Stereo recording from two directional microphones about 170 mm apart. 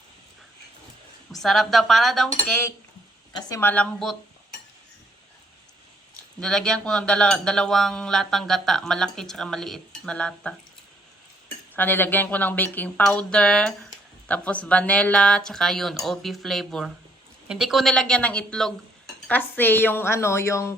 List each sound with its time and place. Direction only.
1.3 s speech: centre (ahead or behind)
2.5 s speech: 10° left (ahead or behind)
6.4 s speech: 5° left (ahead or behind)
11.8 s speech: 10° left (ahead or behind)